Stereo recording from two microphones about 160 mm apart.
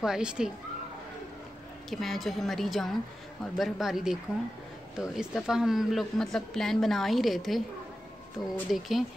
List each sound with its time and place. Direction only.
0.0 s a woman's voice: 5° right (ahead or behind)
1.9 s a woman's voice: centre (ahead or behind)
8.7 s a woman's voice: centre (ahead or behind)